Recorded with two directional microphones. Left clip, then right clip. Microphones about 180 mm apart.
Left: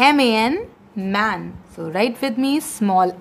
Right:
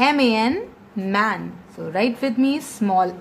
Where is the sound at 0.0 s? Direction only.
30° left (ahead or behind).